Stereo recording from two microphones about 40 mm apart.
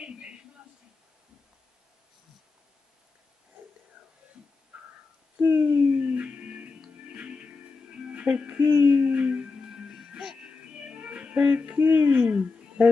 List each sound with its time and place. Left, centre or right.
5.6 s music: right
8.5 s speech: right
9.7 s music: centre
11.0 s music: right
11.8 s a sound: right